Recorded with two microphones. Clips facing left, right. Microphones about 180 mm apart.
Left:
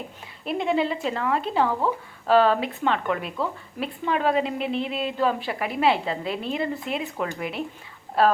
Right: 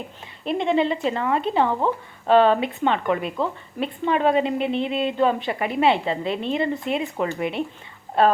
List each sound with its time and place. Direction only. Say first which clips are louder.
0.4 s a woman's voice: right 3 dB; 5° left (ahead or behind)
1.6 s speech: right 2 dB; 25° right (ahead or behind)
2.3 s a woman's voice: right 2 dB; centre (ahead or behind)